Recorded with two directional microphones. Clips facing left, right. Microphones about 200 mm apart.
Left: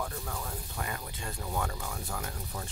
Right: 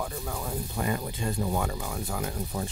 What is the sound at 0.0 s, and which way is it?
Speech, 10° right (ahead or behind).